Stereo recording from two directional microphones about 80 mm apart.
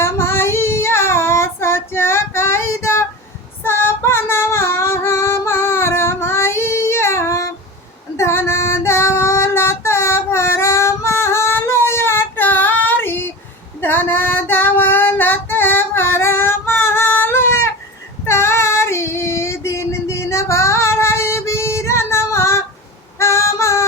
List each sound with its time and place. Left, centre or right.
0.0 s child singing: left
3.6 s female singing: left
23.1 s music: left